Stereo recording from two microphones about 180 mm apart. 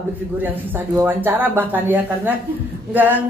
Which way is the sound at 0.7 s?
10° right (ahead or behind).